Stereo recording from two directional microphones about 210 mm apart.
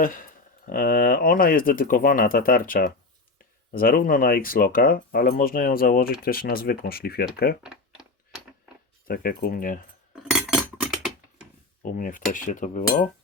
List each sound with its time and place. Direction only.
0.0 s speech: 40° left (ahead or behind)
7.6 s a sound: centre (ahead or behind)
9.0 s speech: 45° left (ahead or behind)
10.3 s chink: 5° right (ahead or behind)
11.8 s cutlery: 40° left (ahead or behind)